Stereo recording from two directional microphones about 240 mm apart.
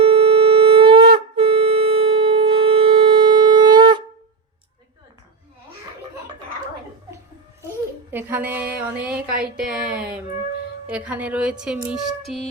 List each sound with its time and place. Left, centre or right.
0.0 s wind instrument: right
8.1 s speech: centre